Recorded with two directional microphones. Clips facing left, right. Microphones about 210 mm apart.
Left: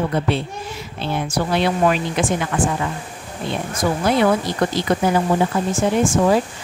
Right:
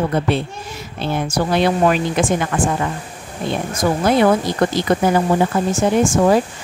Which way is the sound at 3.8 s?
45° right (ahead or behind).